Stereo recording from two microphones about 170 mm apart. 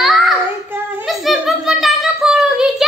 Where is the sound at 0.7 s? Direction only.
Centre (ahead or behind).